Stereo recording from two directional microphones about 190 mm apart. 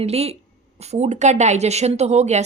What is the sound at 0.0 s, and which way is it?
Speech, 35° right (ahead or behind).